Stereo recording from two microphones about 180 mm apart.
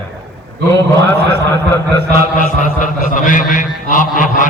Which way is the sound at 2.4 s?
45° left (ahead or behind).